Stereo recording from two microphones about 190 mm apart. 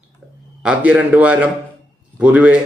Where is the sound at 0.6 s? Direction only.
5° right (ahead or behind).